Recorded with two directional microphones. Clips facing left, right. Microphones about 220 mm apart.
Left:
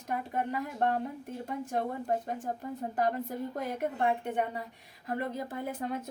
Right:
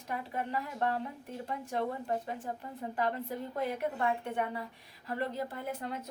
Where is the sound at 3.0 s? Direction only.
45° left (ahead or behind).